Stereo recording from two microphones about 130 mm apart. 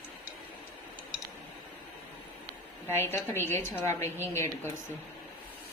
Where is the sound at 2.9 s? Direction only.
20° left (ahead or behind).